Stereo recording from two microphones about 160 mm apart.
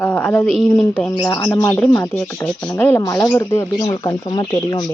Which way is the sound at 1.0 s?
20° left (ahead or behind).